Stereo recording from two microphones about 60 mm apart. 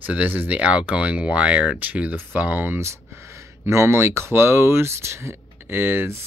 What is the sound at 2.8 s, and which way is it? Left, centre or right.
Speech, right.